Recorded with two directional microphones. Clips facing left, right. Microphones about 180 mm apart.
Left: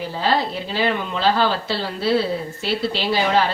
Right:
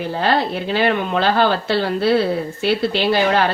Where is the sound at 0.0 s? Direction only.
60° right (ahead or behind).